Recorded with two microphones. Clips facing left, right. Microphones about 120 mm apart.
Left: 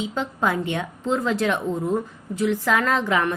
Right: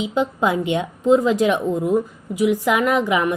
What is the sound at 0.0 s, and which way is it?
Speech, 15° right (ahead or behind).